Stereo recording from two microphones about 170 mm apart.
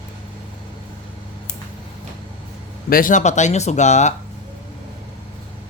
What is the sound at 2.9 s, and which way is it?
Speech, 55° left (ahead or behind).